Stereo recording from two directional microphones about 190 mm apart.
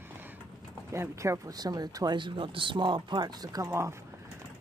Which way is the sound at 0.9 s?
15° right (ahead or behind).